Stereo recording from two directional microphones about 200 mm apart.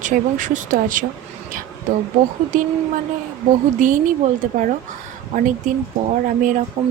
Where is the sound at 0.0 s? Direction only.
40° right (ahead or behind).